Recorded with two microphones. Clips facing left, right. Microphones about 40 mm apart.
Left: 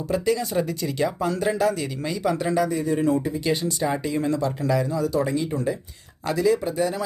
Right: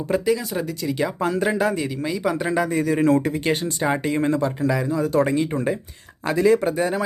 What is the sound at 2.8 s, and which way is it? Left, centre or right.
Speech, right.